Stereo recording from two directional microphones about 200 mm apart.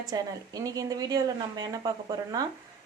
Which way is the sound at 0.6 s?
15° right (ahead or behind).